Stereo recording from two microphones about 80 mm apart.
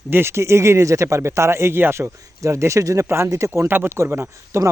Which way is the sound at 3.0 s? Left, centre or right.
Right.